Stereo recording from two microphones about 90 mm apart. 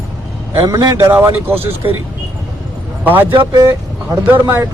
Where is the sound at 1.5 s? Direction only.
90° right.